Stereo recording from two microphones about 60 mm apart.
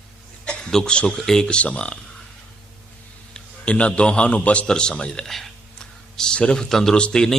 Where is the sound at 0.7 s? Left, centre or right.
Centre.